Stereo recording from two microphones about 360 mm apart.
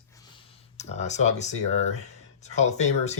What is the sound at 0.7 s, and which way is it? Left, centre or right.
Speech, centre.